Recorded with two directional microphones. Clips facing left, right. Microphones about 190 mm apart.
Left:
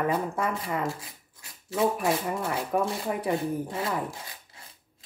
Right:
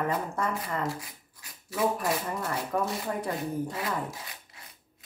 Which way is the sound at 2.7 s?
15° left (ahead or behind).